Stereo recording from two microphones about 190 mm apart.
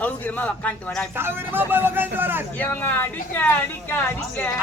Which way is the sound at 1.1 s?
10° right (ahead or behind).